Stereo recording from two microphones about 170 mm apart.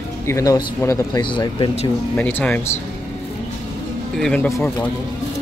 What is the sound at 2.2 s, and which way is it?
Speech, 10° left (ahead or behind).